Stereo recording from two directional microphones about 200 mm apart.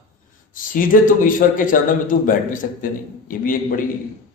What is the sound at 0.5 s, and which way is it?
A man's voice, 40° left (ahead or behind).